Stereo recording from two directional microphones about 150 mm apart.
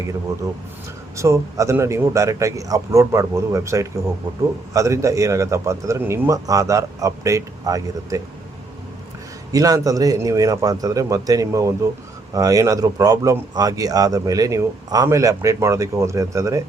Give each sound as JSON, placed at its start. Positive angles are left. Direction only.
{"t": 1.1, "sound": "speech", "side_deg": -20}
{"t": 9.5, "sound": "speech", "side_deg": -25}